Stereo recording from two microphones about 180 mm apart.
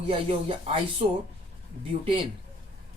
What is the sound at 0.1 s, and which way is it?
Speech, 30° right (ahead or behind).